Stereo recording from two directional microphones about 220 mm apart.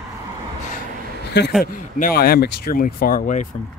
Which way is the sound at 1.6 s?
40° left (ahead or behind).